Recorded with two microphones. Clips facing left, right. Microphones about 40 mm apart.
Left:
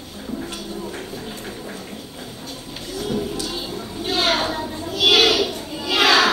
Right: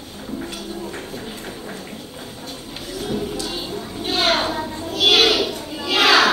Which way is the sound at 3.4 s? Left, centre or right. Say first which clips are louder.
Right 1 dB; centre.